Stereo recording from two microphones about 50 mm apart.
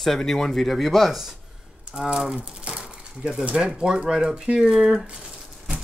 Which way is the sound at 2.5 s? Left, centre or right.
Right.